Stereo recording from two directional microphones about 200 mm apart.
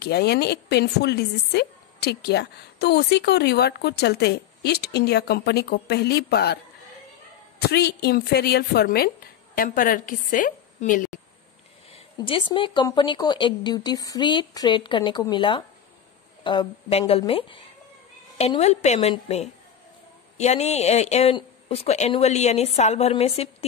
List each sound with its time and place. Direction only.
0.0 s a woman's voice: 55° left (ahead or behind)
11.9 s speech: 25° left (ahead or behind)